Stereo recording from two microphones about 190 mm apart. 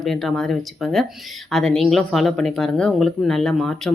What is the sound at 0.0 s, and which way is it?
Speech, centre (ahead or behind).